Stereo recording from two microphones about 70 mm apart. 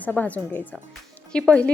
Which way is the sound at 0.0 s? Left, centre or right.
Left.